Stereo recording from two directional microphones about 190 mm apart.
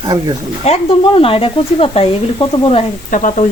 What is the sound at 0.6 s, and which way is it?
Speech, 30° left (ahead or behind).